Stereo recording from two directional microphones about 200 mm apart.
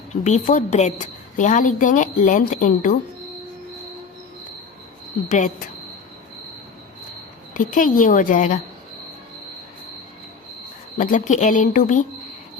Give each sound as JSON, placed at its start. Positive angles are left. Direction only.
{"t": 0.1, "sound": "a woman's voice", "side_deg": 35}
{"t": 5.3, "sound": "a woman's voice", "side_deg": 40}
{"t": 7.5, "sound": "a woman's voice", "side_deg": 40}
{"t": 10.9, "sound": "a woman's voice", "side_deg": 40}